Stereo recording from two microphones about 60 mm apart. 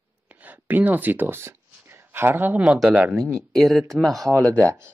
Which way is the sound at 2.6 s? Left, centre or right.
Centre.